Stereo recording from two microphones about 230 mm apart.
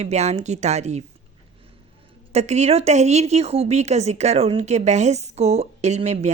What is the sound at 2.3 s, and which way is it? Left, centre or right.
A woman's voice, right.